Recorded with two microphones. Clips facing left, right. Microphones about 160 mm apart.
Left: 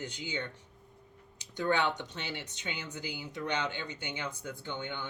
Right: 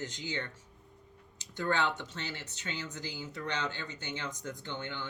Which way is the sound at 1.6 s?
15° left (ahead or behind).